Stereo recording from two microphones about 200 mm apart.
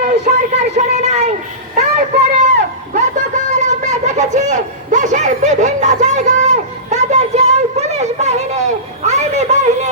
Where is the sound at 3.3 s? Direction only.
35° right (ahead or behind).